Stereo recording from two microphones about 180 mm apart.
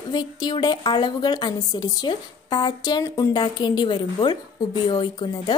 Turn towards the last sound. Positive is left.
turn(degrees=20)  # may be behind; listen again after turning